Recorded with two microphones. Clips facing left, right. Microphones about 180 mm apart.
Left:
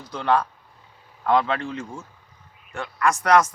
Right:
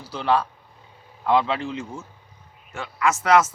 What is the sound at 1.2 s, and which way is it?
Speech, 5° right (ahead or behind).